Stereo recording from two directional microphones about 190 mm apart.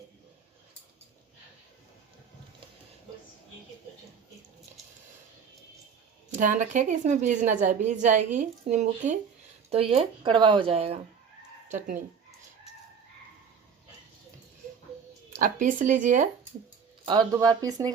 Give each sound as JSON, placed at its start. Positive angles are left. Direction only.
{"t": 6.3, "sound": "a woman's voice", "side_deg": -40}
{"t": 15.4, "sound": "speech", "side_deg": -45}
{"t": 17.1, "sound": "speech", "side_deg": -20}